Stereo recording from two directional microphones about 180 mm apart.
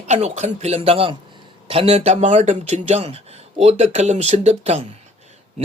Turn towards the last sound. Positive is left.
turn(degrees=-40)  # may be behind; listen again after turning